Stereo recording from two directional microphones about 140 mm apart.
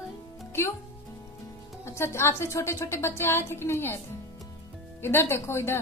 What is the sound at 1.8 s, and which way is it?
A woman's voice, 20° left (ahead or behind).